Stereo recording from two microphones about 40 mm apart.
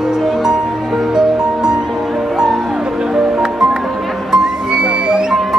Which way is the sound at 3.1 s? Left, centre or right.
Centre.